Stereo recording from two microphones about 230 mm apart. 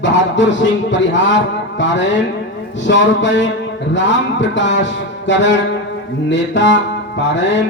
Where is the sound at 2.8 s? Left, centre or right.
Left.